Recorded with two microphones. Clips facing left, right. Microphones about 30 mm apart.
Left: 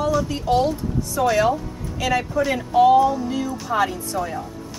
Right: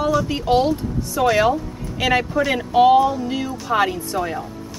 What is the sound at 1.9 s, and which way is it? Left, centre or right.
A woman's voice, right.